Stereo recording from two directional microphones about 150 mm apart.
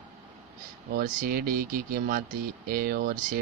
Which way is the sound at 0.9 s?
80° right.